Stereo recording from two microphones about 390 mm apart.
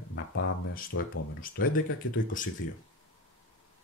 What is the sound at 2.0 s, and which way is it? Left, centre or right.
Speech, left.